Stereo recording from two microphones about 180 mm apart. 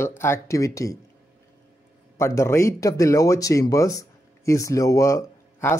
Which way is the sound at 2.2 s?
15° left (ahead or behind).